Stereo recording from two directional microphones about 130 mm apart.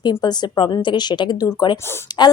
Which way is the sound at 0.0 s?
30° left (ahead or behind).